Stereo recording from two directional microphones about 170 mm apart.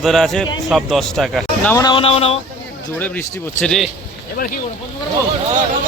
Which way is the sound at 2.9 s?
10° left (ahead or behind).